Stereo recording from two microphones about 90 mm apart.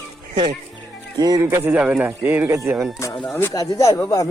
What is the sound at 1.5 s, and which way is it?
Speech, 25° right (ahead or behind).